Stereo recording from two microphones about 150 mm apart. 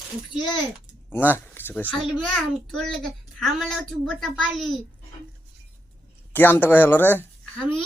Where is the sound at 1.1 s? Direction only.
15° left (ahead or behind).